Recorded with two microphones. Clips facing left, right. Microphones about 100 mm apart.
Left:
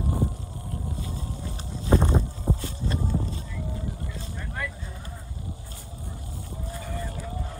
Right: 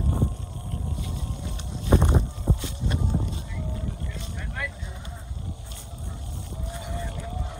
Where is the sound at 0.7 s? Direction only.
65° right (ahead or behind).